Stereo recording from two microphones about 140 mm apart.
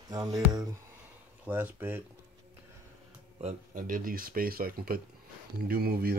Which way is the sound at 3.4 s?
50° right (ahead or behind).